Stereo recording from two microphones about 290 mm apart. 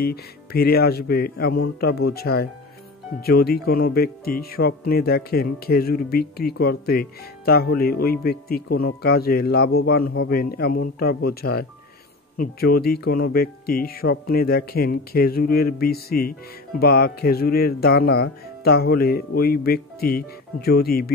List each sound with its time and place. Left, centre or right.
0.0 s speech: left
12.4 s speech: left